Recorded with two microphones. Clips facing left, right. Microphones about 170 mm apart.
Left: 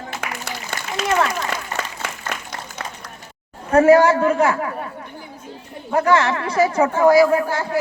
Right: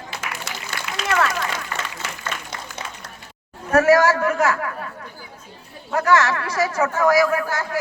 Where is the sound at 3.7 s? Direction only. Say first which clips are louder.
Left 3 dB; 30° left (ahead or behind).